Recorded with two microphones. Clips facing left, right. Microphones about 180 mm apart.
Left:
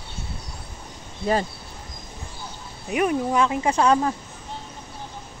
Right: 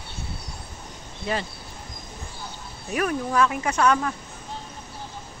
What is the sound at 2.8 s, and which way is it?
Speech, 20° left (ahead or behind).